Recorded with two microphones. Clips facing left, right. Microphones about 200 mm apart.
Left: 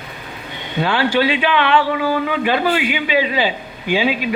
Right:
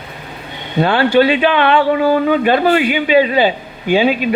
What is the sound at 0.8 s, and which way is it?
Speech, 55° right (ahead or behind).